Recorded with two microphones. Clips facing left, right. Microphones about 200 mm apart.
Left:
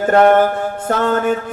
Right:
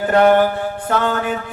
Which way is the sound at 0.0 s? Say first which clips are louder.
Left 2 dB; 40° left (ahead or behind).